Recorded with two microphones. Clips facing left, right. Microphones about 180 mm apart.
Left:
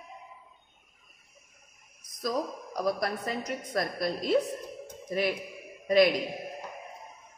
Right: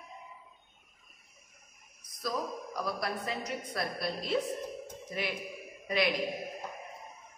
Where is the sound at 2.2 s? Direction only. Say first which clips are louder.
Left 4 dB; 40° left (ahead or behind).